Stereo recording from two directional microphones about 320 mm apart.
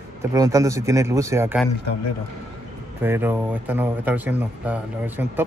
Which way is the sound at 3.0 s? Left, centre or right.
Centre.